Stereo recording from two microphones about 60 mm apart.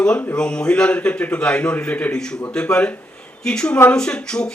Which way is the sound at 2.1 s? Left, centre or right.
Centre.